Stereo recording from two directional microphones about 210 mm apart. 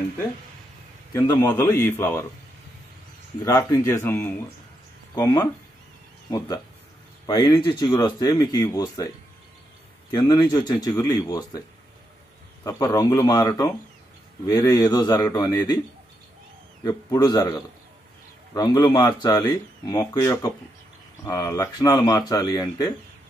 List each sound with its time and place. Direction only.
1.1 s speech: 15° left (ahead or behind)
3.4 s speech: 15° left (ahead or behind)
10.1 s speech: 20° left (ahead or behind)
12.6 s speech: 15° left (ahead or behind)
16.8 s speech: 20° left (ahead or behind)